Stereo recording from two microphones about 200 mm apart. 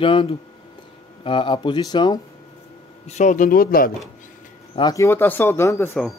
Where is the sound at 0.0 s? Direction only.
25° left (ahead or behind).